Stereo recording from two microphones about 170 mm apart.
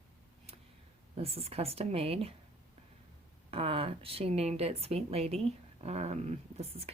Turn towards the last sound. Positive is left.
turn(degrees=-35)  # may be behind; listen again after turning